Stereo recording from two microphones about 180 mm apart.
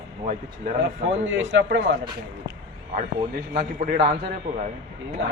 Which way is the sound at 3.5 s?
55° right (ahead or behind).